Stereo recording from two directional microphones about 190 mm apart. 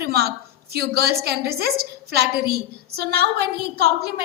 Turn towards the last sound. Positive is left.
turn(degrees=-60)  # may be behind; listen again after turning